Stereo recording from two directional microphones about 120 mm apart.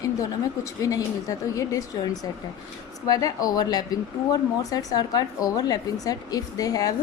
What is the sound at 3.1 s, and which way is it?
Speech, 30° left (ahead or behind).